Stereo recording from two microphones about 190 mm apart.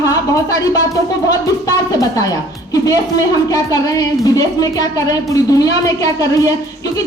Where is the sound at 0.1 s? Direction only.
20° left (ahead or behind).